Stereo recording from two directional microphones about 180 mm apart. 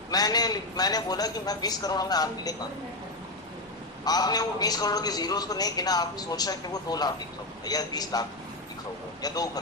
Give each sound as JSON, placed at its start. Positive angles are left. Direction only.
{"t": 0.1, "sound": "a man's voice", "side_deg": 20}
{"t": 4.0, "sound": "a man's voice", "side_deg": 20}